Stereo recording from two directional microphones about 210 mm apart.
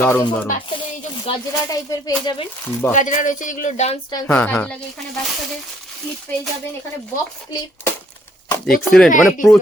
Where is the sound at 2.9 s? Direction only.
35° left (ahead or behind).